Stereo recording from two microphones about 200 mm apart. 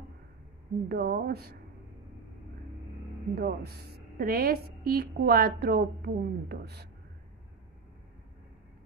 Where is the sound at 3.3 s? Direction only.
50° right (ahead or behind).